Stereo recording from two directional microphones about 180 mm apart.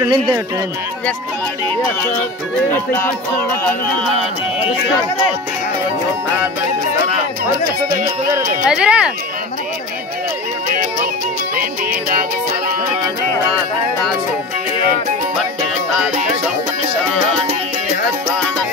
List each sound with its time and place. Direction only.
0.0 s speech: 25° right (ahead or behind)
8.6 s speech: 5° right (ahead or behind)
10.7 s music: 50° right (ahead or behind)